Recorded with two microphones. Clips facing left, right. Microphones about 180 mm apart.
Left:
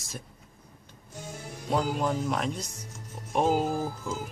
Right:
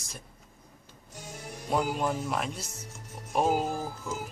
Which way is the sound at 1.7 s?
5° right (ahead or behind).